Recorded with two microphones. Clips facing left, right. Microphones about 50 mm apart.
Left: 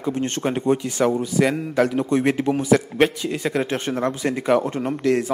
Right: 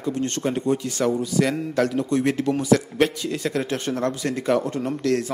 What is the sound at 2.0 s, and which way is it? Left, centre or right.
A man's voice, left.